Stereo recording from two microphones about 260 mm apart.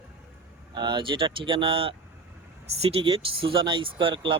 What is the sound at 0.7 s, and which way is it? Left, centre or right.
Speech, centre.